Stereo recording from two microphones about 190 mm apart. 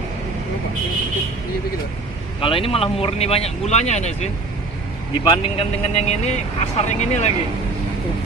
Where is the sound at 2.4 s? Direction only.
30° left (ahead or behind).